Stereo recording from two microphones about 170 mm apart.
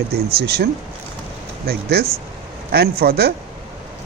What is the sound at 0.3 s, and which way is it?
A man's voice, 70° right (ahead or behind).